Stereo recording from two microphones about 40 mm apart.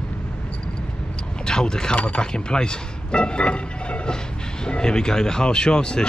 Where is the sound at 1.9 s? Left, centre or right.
Left.